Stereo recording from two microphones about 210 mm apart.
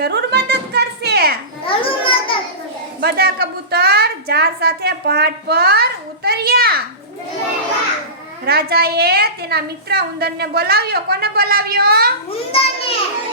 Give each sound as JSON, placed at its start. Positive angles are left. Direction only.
{"t": 0.0, "sound": "a sound", "side_deg": -50}
{"t": 1.6, "sound": "children playing", "side_deg": 25}
{"t": 3.0, "sound": "a woman's voice", "side_deg": -45}
{"t": 8.4, "sound": "a woman's voice", "side_deg": -50}
{"t": 12.3, "sound": "a child's voice", "side_deg": 25}